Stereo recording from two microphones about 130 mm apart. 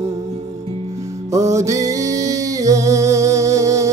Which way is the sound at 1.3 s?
25° right (ahead or behind).